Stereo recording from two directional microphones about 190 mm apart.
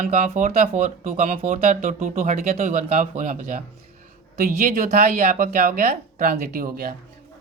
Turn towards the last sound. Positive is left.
turn(degrees=-50)  # may be behind; listen again after turning